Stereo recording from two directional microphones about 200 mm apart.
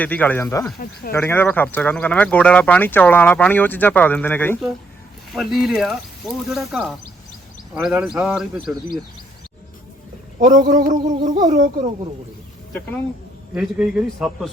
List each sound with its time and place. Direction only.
0.0 s speech: 10° left (ahead or behind)
5.3 s speech: centre (ahead or behind)
10.4 s a sound: 40° right (ahead or behind)
13.5 s speech: 5° right (ahead or behind)